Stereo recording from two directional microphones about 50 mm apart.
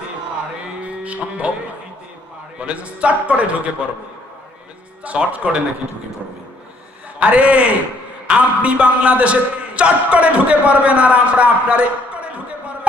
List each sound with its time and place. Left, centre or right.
0.8 s a sound: right
2.6 s a man's voice: right
5.0 s a man's voice: right
7.2 s a man's voice: right